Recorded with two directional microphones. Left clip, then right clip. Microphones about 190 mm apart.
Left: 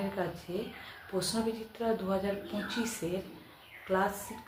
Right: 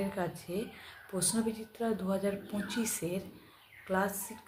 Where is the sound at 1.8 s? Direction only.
30° right (ahead or behind).